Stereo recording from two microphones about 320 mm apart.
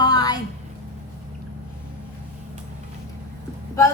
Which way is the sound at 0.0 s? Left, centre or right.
Centre.